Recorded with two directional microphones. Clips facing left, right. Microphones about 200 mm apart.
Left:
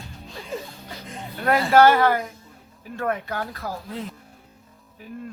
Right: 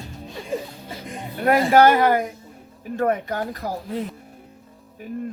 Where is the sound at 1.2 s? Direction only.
15° right (ahead or behind).